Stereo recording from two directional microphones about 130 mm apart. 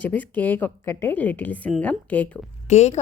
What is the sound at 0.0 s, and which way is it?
A woman's voice, 15° left (ahead or behind).